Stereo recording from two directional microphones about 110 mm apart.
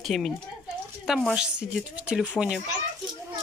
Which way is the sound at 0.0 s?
Centre (ahead or behind).